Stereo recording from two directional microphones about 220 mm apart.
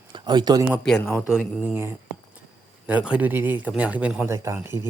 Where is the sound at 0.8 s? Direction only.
5° left (ahead or behind).